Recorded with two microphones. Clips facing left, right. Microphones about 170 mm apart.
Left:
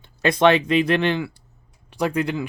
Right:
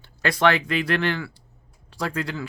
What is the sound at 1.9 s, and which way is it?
Speech, 20° left (ahead or behind).